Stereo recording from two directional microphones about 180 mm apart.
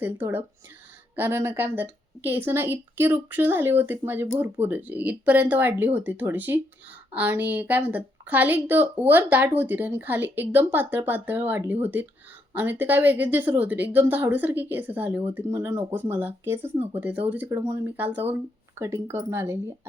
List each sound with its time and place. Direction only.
0.0 s a woman's voice: 10° right (ahead or behind)